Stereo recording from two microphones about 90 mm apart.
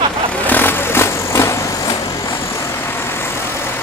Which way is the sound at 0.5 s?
20° left (ahead or behind).